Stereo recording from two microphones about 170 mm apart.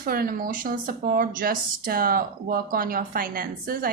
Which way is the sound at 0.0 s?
60° right (ahead or behind).